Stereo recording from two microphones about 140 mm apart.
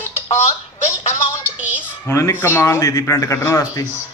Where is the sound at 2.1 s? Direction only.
20° left (ahead or behind).